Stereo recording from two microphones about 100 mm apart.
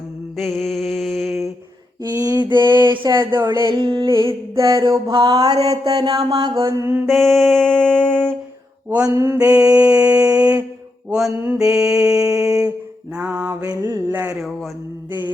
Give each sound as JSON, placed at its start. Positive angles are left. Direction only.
{"t": 0.3, "sound": "mantra", "side_deg": 0}
{"t": 2.0, "sound": "a sound", "side_deg": -40}
{"t": 3.1, "sound": "mantra", "side_deg": -35}
{"t": 3.7, "sound": "a sound", "side_deg": -50}
{"t": 4.2, "sound": "mantra", "side_deg": -30}
{"t": 5.1, "sound": "a sound", "side_deg": -40}
{"t": 5.6, "sound": "mantra", "side_deg": -40}
{"t": 6.8, "sound": "mantra", "side_deg": -25}
{"t": 7.1, "sound": "music", "side_deg": 5}
{"t": 9.0, "sound": "mantra", "side_deg": -30}
{"t": 9.4, "sound": "mantra", "side_deg": -10}
{"t": 11.6, "sound": "mantra", "side_deg": -5}
{"t": 13.7, "sound": "mantra", "side_deg": -30}